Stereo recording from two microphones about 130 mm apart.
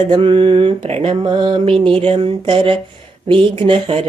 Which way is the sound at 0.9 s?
50° right (ahead or behind).